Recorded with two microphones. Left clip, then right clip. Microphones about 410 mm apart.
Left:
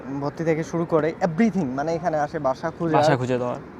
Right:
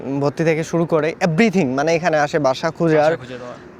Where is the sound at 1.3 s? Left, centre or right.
Right.